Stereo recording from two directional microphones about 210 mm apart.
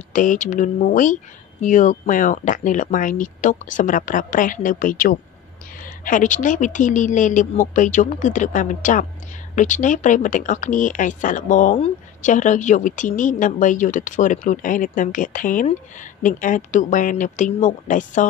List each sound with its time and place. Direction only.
0.1 s speech: 35° left (ahead or behind)